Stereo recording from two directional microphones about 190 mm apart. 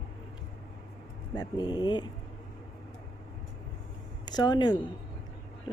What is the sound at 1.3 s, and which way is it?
Speech, 20° left (ahead or behind).